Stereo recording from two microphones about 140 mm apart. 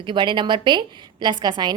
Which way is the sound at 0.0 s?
35° right (ahead or behind).